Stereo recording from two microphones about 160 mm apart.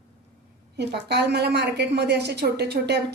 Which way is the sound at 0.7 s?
90° right.